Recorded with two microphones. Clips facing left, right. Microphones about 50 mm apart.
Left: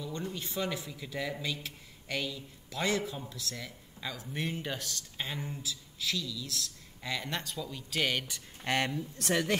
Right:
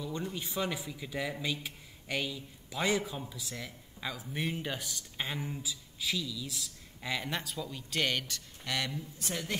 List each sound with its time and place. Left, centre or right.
0.0 s a sound: centre
0.5 s speech: centre
8.6 s speech: left
9.2 s a woman's voice: left